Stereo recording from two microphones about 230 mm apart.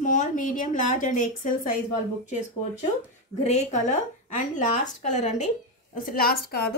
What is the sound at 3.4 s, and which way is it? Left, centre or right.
A woman's voice, left.